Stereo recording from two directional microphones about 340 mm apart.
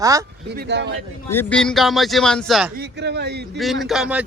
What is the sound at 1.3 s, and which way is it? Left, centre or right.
Speech, centre.